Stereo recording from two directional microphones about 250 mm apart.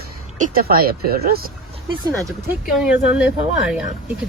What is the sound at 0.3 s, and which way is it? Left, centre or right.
Speech, right.